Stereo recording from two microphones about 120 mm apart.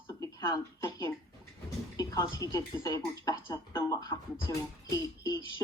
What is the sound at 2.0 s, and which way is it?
Speech, 30° left (ahead or behind).